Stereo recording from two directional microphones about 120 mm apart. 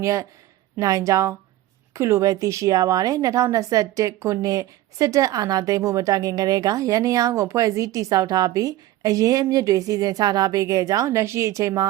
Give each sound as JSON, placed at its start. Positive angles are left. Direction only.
{"t": 0.0, "sound": "a woman's voice", "side_deg": -25}